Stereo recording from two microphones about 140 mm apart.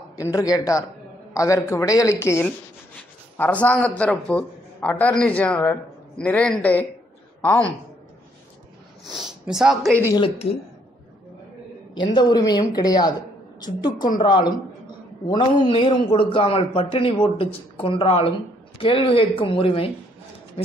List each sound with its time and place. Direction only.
0.1 s a woman's voice: 25° left (ahead or behind)
9.1 s speech: centre (ahead or behind)
11.9 s a woman's voice: 30° left (ahead or behind)